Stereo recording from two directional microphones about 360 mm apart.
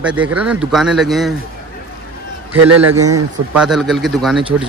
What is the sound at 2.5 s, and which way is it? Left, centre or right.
Speech, right.